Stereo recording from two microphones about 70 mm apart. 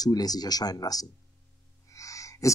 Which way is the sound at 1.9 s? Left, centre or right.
Left.